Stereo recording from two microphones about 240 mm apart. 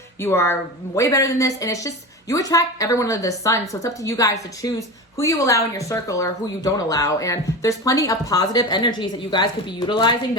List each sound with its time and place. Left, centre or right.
0.2 s speech: centre